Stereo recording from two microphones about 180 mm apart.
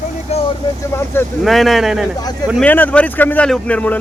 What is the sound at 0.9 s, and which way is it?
Speech, 15° left (ahead or behind).